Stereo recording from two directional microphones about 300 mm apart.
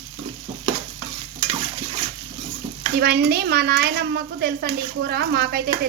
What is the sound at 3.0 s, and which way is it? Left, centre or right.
Speech, right.